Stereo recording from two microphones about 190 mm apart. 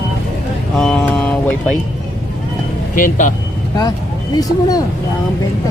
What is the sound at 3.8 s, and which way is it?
Speech, 20° left (ahead or behind).